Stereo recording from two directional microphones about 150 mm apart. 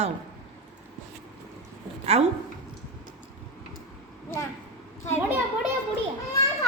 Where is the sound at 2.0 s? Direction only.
45° right (ahead or behind).